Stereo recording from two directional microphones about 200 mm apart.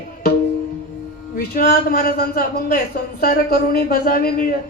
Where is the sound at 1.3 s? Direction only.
45° left (ahead or behind).